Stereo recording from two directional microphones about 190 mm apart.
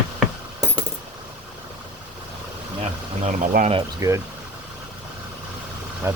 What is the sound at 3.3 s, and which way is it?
Speech, 40° right (ahead or behind).